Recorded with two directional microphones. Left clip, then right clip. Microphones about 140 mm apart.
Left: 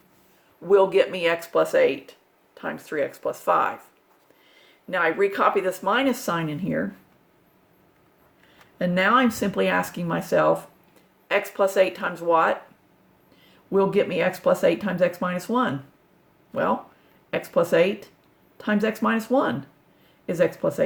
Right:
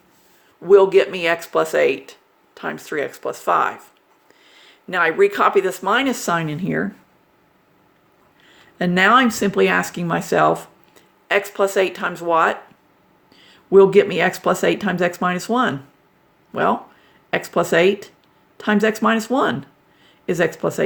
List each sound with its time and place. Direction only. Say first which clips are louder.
0.6 s speech: right 6 dB; 40° right (ahead or behind)
4.5 s speech: right 5 dB; 60° right (ahead or behind)
8.8 s speech: right 6 dB; 55° right (ahead or behind)
17.3 s speech: right 3 dB; 55° right (ahead or behind)